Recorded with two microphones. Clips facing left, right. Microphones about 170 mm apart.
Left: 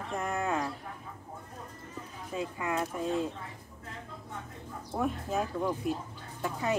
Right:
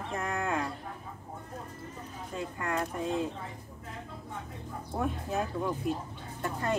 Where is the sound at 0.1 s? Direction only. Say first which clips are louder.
Left 1 dB; centre (ahead or behind).